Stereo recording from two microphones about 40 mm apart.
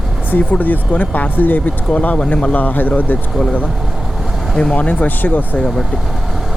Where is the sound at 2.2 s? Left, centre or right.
Left.